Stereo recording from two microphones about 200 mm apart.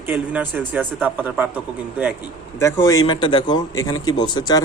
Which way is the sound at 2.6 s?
15° left (ahead or behind).